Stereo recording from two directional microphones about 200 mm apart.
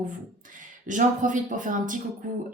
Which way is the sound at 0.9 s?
40° right (ahead or behind).